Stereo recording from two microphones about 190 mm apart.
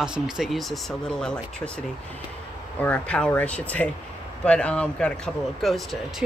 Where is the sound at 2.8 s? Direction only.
5° left (ahead or behind).